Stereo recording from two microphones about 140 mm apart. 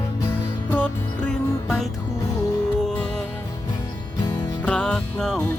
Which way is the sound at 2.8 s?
5° left (ahead or behind).